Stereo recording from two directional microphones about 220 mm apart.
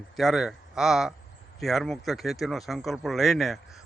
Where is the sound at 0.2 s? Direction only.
Centre (ahead or behind).